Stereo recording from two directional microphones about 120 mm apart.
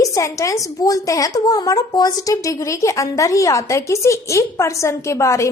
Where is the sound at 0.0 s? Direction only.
25° left (ahead or behind).